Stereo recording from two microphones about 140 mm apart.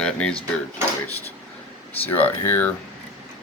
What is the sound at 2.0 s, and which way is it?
Speech, 10° left (ahead or behind).